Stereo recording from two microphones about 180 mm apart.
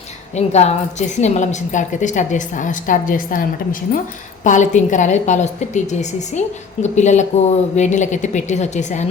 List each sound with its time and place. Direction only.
0.3 s a woman's voice: 40° left (ahead or behind)